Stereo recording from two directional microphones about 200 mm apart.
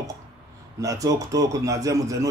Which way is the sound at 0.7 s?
15° right (ahead or behind).